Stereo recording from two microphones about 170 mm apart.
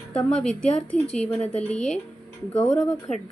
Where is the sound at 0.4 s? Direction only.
5° left (ahead or behind).